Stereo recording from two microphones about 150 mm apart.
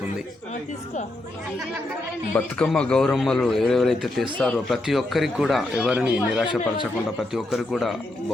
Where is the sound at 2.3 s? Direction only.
5° left (ahead or behind).